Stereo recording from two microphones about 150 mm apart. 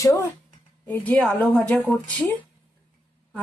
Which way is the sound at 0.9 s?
10° left (ahead or behind).